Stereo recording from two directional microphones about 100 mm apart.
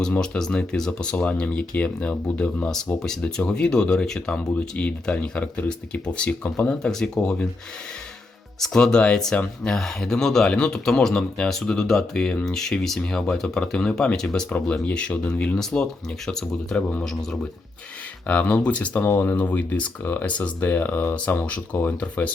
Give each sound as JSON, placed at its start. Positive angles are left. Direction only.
{"t": 0.0, "sound": "speech", "side_deg": 5}
{"t": 8.6, "sound": "speech", "side_deg": 5}
{"t": 18.3, "sound": "speech", "side_deg": 15}